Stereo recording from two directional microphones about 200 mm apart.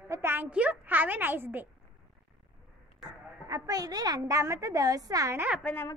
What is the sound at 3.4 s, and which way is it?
A woman's voice, 20° right (ahead or behind).